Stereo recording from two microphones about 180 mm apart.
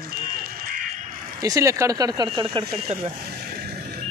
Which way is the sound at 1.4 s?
20° right (ahead or behind).